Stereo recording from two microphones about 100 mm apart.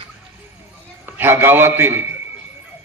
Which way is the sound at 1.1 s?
20° right (ahead or behind).